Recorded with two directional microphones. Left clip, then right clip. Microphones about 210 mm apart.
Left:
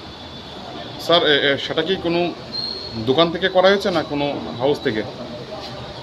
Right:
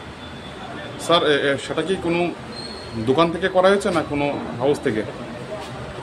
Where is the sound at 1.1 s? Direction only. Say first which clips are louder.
Left 2 dB; centre (ahead or behind).